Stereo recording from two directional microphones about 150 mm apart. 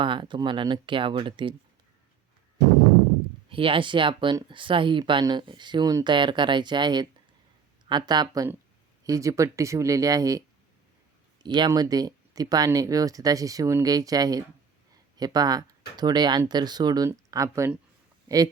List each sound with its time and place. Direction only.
0.0 s speech: 35° right (ahead or behind)
3.5 s speech: 35° right (ahead or behind)
11.4 s speech: 30° right (ahead or behind)